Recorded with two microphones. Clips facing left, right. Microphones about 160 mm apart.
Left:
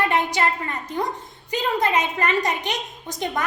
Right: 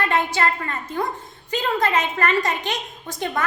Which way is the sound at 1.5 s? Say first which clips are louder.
Even; 15° left (ahead or behind).